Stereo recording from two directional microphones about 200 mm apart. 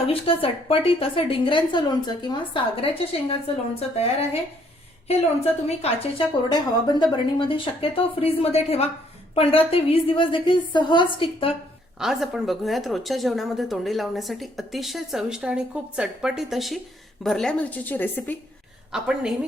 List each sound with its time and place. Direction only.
0.1 s a woman's voice: 25° left (ahead or behind)
5.6 s a woman's voice: 30° left (ahead or behind)
11.9 s a woman's voice: 5° right (ahead or behind)
18.9 s a woman's voice: 5° right (ahead or behind)